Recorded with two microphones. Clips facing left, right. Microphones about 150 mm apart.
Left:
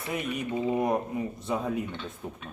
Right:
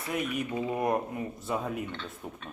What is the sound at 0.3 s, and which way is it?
Speech, centre (ahead or behind).